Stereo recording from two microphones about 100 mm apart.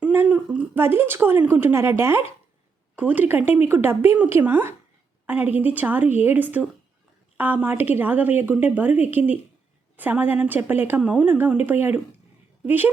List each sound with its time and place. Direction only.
0.1 s a woman's voice: 15° right (ahead or behind)
2.9 s a woman's voice: 15° right (ahead or behind)